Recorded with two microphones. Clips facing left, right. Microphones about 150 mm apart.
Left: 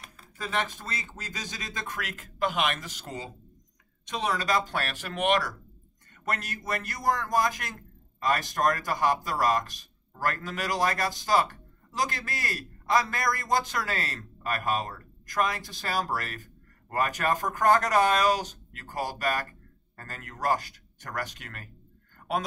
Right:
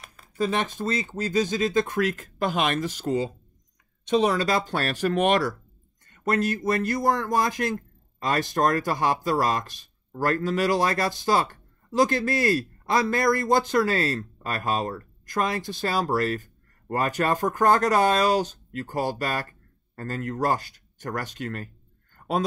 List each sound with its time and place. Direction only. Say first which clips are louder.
0.4 s a man's voice: right 6 dB; 25° right (ahead or behind)